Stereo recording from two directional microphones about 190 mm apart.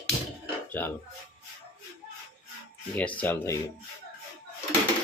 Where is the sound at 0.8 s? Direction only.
10° left (ahead or behind).